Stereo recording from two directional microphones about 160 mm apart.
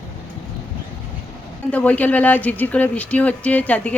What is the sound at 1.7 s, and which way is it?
Speech, 10° left (ahead or behind).